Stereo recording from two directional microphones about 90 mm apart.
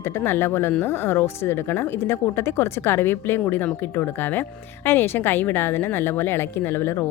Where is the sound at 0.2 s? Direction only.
25° left (ahead or behind).